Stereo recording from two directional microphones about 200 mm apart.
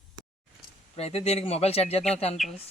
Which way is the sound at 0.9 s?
30° left (ahead or behind).